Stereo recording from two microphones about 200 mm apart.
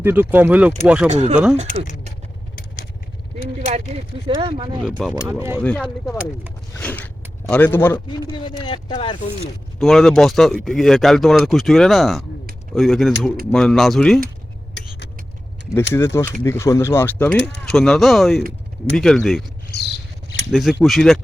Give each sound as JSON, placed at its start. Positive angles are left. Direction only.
{"t": 0.0, "sound": "speech", "side_deg": -10}
{"t": 1.1, "sound": "speech", "side_deg": -35}
{"t": 4.4, "sound": "speech", "side_deg": -25}
{"t": 4.8, "sound": "speech", "side_deg": 0}
{"t": 5.2, "sound": "speech", "side_deg": -10}
{"t": 5.6, "sound": "speech", "side_deg": 5}
{"t": 6.7, "sound": "speech", "side_deg": 10}
{"t": 8.3, "sound": "speech", "side_deg": 25}
{"t": 9.7, "sound": "speech", "side_deg": 0}
{"t": 14.8, "sound": "vehicle", "side_deg": 60}
{"t": 15.9, "sound": "speech", "side_deg": 15}
{"t": 19.7, "sound": "a sound", "side_deg": 55}
{"t": 20.5, "sound": "speech", "side_deg": 0}